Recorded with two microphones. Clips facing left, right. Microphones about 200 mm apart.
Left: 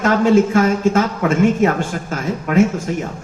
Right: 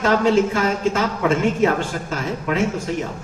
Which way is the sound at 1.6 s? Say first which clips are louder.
Left 2 dB; 45° left (ahead or behind).